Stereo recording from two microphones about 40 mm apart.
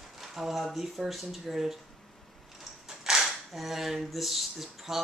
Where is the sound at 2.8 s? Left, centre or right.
Centre.